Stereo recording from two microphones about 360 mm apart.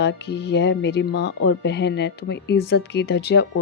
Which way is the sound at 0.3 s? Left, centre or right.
Left.